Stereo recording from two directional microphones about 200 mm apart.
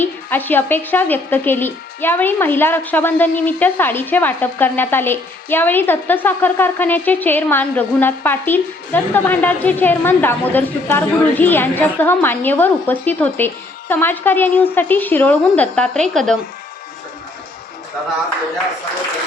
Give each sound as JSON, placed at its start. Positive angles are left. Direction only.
{"t": 0.0, "sound": "speech", "side_deg": 10}